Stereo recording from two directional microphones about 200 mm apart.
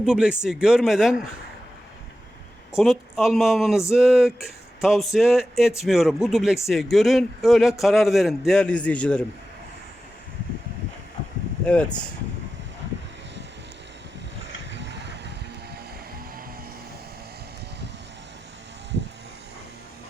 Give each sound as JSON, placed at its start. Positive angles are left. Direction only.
{"t": 0.0, "sound": "speech", "side_deg": -5}
{"t": 2.7, "sound": "speech", "side_deg": 0}
{"t": 11.6, "sound": "speech", "side_deg": 5}
{"t": 14.7, "sound": "vehicle", "side_deg": -60}